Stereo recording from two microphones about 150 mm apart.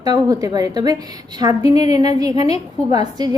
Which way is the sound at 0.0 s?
25° right (ahead or behind).